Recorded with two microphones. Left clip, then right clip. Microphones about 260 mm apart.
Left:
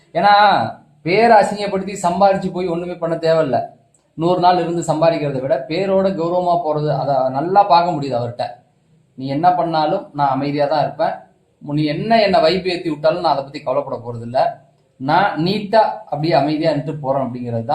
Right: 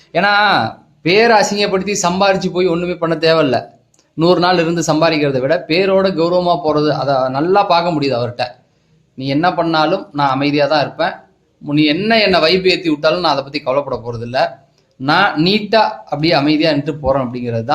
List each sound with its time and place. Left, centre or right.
0.1 s a man's voice: right
15.4 s a man's voice: right